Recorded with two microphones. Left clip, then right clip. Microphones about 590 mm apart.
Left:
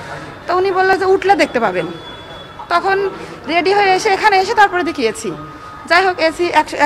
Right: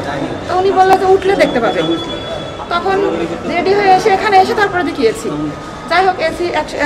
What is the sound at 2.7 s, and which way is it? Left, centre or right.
A woman's voice, left.